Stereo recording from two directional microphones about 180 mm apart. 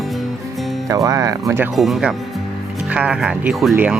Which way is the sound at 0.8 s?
20° right (ahead or behind).